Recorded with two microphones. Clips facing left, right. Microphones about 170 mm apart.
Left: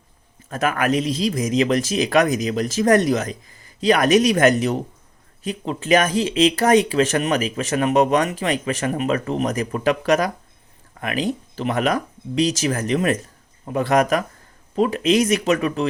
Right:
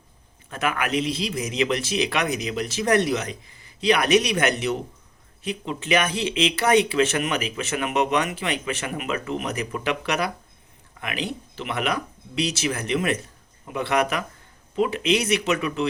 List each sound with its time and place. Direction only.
0.5 s speech: 40° left (ahead or behind)